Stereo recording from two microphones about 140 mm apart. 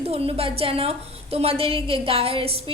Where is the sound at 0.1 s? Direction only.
45° right (ahead or behind).